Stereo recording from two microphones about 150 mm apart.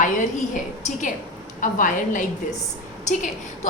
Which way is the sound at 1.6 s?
60° left (ahead or behind).